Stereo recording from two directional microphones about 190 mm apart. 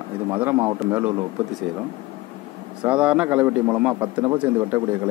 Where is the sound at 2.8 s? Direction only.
5° right (ahead or behind).